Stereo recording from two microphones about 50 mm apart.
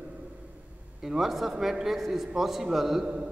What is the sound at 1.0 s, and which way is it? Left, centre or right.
A man's voice, centre.